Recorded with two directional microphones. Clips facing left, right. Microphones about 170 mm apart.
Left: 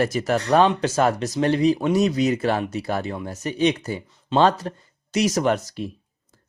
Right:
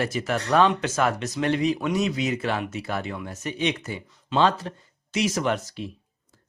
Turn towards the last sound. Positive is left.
turn(degrees=45)  # may be behind; listen again after turning